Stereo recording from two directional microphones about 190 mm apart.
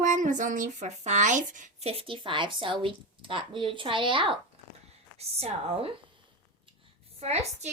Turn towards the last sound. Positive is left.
turn(degrees=-35)  # may be behind; listen again after turning